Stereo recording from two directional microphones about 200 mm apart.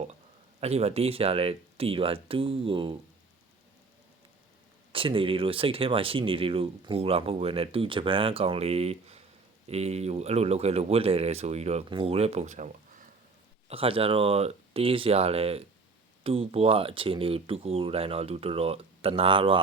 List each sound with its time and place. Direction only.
0.6 s speech: 30° right (ahead or behind)
4.9 s speech: 25° right (ahead or behind)